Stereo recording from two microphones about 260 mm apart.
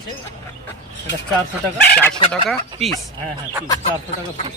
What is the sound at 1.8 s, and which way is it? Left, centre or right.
Speech, centre.